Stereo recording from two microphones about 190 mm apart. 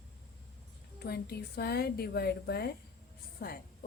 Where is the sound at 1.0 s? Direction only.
55° left (ahead or behind).